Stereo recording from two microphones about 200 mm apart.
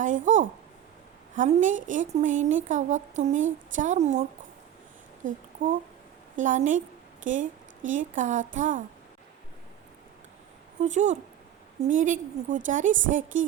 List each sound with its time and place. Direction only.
0.0 s a woman's voice: 40° right (ahead or behind)
6.3 s a woman's voice: 40° right (ahead or behind)
10.8 s a woman's voice: 35° right (ahead or behind)